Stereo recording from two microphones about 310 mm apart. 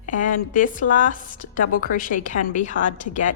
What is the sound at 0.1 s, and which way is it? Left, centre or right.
A woman's voice, left.